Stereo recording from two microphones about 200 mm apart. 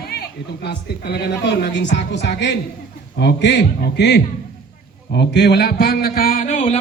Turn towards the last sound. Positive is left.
turn(degrees=35)  # may be behind; listen again after turning